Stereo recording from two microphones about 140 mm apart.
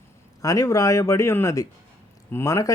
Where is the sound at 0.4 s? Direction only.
25° left (ahead or behind).